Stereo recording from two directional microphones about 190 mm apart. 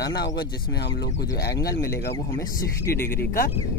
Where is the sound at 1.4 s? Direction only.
55° left (ahead or behind).